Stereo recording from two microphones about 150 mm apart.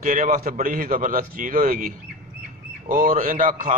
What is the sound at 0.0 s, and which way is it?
A man's voice, 60° right (ahead or behind).